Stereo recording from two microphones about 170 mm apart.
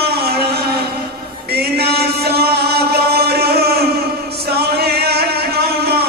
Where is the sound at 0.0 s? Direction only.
70° right (ahead or behind).